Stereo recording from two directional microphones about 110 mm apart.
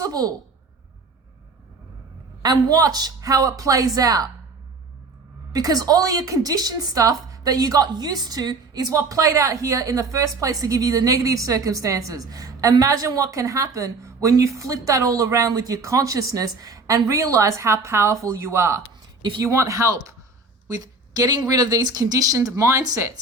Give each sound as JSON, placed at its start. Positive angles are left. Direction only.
{"t": 0.0, "sound": "a woman's voice", "side_deg": -35}
{"t": 2.4, "sound": "a woman's voice", "side_deg": -30}
{"t": 5.5, "sound": "a woman's voice", "side_deg": -35}